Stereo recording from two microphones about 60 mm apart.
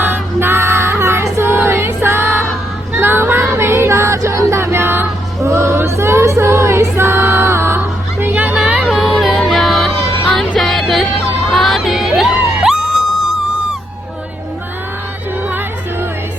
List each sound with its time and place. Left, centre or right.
0.0 s music: right
7.8 s music: right
8.5 s music: centre
9.1 s music: centre
10.6 s a sound: centre
11.5 s crowd: centre
12.6 s a sound: centre
15.4 s music: right